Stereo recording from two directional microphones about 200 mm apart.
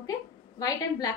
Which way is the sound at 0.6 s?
20° left (ahead or behind).